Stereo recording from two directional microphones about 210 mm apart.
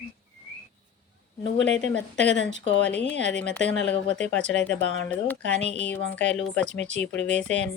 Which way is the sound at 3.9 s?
55° left (ahead or behind).